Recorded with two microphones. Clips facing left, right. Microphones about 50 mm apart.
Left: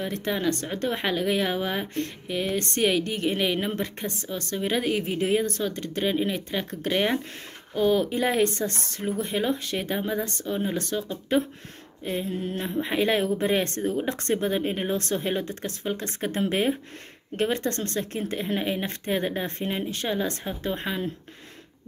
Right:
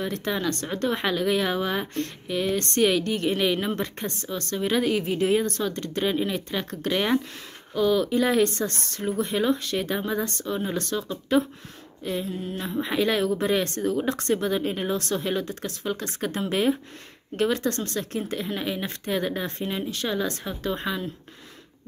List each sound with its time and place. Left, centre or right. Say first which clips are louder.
0.0 s speech: even; centre
12.0 s speech: even; left